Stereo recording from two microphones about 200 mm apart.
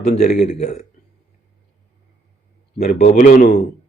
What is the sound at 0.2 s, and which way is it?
Speech, 40° left (ahead or behind).